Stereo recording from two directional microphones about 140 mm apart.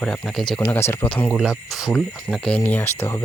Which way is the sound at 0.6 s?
20° left (ahead or behind).